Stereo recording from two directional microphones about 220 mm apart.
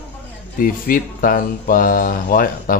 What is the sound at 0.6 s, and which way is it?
Speech, 40° left (ahead or behind).